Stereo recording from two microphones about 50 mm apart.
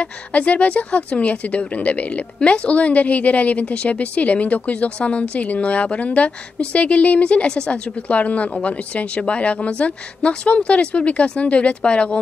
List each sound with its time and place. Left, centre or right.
0.0 s a woman's voice: left